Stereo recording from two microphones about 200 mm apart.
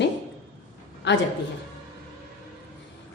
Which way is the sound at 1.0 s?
60° left (ahead or behind).